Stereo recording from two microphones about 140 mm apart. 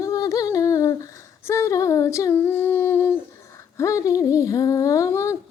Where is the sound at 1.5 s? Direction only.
20° left (ahead or behind).